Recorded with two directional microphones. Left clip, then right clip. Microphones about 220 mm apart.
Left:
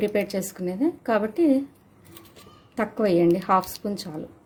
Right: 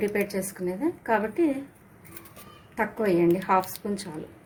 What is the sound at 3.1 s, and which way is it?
Speech, 60° left (ahead or behind).